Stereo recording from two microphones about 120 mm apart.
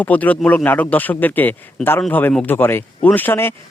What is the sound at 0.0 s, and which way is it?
Speech, 15° left (ahead or behind).